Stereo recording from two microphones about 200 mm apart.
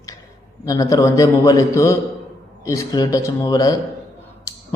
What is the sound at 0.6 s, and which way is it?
A man's voice, 15° left (ahead or behind).